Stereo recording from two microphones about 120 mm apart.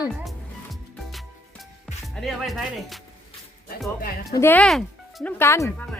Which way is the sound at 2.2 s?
Centre (ahead or behind).